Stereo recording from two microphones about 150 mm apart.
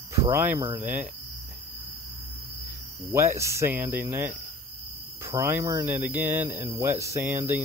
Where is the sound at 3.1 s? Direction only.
15° right (ahead or behind).